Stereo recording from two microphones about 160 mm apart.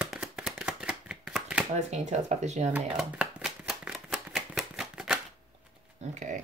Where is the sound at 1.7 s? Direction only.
45° right (ahead or behind).